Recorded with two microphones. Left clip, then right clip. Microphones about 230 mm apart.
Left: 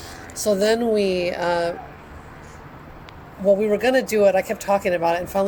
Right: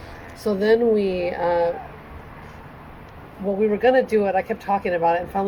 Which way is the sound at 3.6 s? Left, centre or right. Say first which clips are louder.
Right 1 dB; left.